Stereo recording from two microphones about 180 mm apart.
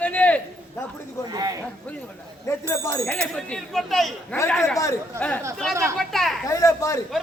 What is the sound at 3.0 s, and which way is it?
A man's voice, 5° left (ahead or behind).